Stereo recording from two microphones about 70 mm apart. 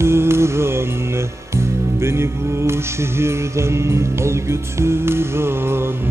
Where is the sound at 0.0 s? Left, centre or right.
Right.